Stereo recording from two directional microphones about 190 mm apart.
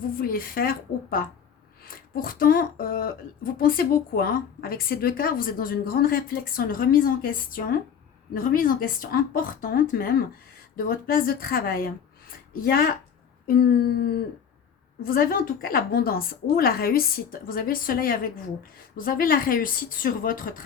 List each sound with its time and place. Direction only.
0.0 s speech: 50° left (ahead or behind)
13.5 s a sound: 55° left (ahead or behind)
15.0 s speech: 50° left (ahead or behind)